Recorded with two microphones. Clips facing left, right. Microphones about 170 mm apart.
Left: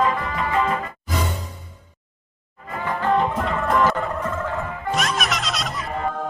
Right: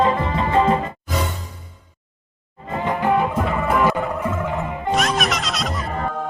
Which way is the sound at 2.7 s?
20° right (ahead or behind).